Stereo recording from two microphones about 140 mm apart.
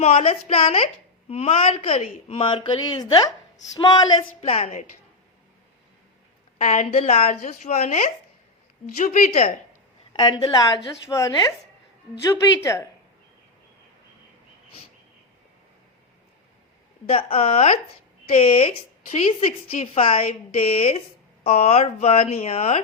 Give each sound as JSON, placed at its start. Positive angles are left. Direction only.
{"t": 0.0, "sound": "a woman's voice", "side_deg": 50}
{"t": 4.4, "sound": "speech", "side_deg": 45}
{"t": 6.6, "sound": "speech", "side_deg": 50}
{"t": 9.0, "sound": "a woman's voice", "side_deg": 80}
{"t": 10.1, "sound": "a woman's voice", "side_deg": 35}
{"t": 17.1, "sound": "speech", "side_deg": 45}